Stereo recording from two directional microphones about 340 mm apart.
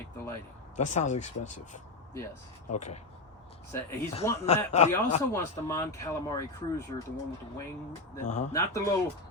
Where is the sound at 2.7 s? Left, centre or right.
Left.